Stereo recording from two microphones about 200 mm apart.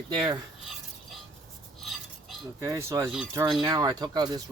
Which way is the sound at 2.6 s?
15° right (ahead or behind).